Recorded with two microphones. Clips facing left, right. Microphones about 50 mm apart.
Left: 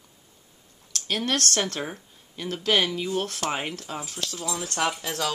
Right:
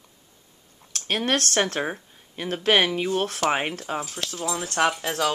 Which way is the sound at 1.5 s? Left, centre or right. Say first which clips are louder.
Right 4 dB; right.